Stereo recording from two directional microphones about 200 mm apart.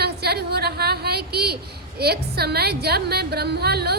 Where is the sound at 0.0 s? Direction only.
55° right (ahead or behind).